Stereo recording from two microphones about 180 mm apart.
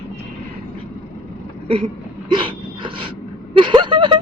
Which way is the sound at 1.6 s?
30° right (ahead or behind).